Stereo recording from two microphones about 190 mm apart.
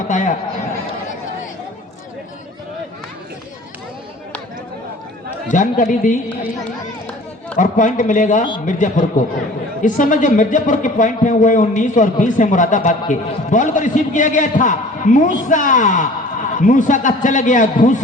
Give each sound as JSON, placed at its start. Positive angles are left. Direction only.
{"t": 0.1, "sound": "a man's voice", "side_deg": 40}
{"t": 5.5, "sound": "a man's voice", "side_deg": 40}
{"t": 7.5, "sound": "a man's voice", "side_deg": 40}